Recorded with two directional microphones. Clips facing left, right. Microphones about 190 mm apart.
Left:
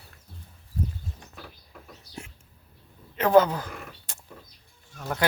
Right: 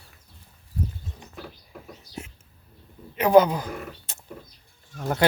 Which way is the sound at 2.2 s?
20° right (ahead or behind).